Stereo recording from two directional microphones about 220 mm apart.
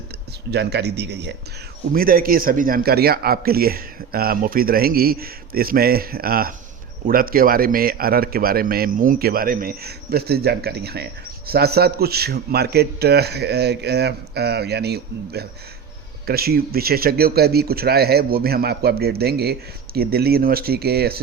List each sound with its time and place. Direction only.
0.5 s a man's voice: 50° right (ahead or behind)